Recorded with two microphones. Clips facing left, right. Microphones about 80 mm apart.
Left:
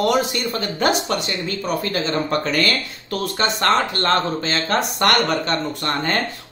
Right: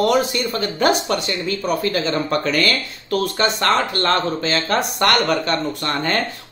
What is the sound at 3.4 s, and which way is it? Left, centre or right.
Speech, left.